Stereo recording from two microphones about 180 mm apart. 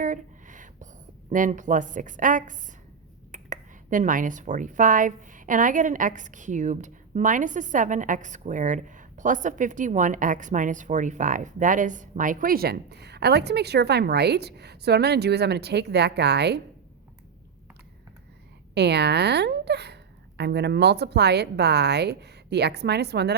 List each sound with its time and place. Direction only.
0.0 s a sound: 45° right (ahead or behind)
1.3 s speech: 45° right (ahead or behind); by 16.6 s 70° right (ahead or behind)
18.7 s a woman's voice: 70° right (ahead or behind)